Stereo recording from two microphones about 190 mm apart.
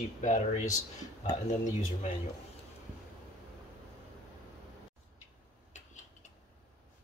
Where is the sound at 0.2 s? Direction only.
40° left (ahead or behind).